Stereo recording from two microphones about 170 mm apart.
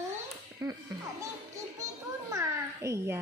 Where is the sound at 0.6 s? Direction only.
20° right (ahead or behind).